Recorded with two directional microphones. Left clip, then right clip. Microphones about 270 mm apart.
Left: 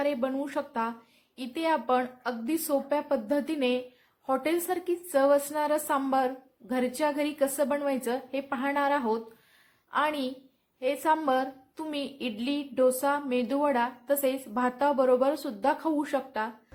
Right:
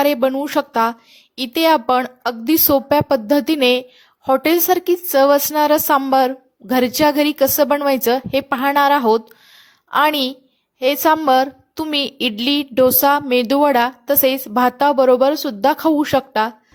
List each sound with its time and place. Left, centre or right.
0.0 s a woman's voice: right